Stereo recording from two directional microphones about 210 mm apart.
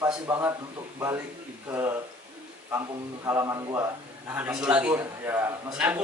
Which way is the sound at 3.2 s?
15° right (ahead or behind).